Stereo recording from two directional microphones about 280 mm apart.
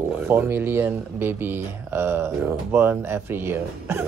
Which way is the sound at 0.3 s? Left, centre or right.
Centre.